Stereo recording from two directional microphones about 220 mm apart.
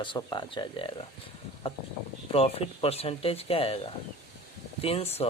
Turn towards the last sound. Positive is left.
turn(degrees=25)  # may be behind; listen again after turning